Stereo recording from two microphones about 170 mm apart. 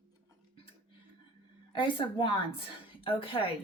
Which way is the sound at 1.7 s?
30° left (ahead or behind).